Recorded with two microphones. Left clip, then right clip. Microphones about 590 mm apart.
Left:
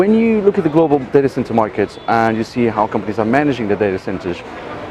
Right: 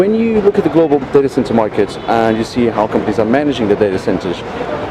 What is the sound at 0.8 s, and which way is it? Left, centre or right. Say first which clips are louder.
Speech: right 1 dB; left.